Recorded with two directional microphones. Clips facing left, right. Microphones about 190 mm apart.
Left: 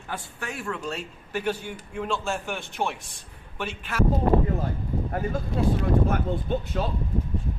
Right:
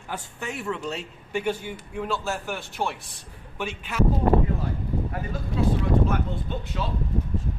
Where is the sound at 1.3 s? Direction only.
10° right (ahead or behind).